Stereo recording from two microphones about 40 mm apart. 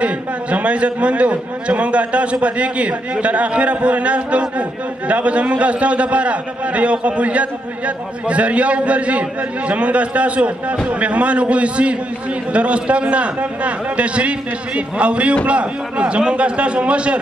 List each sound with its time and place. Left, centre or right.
0.0 s a man's voice: right